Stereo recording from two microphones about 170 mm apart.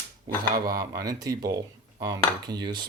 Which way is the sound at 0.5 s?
20° right (ahead or behind).